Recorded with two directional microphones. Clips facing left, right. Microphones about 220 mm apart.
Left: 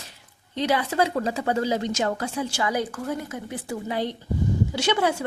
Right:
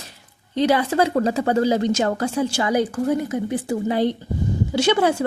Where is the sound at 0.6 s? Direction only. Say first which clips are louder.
Right 5 dB; 40° right (ahead or behind).